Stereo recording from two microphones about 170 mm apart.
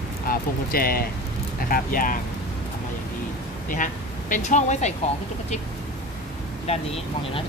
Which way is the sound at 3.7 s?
50° left (ahead or behind).